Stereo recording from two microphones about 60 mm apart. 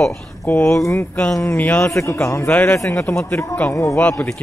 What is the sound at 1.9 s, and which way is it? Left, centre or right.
Speech, left.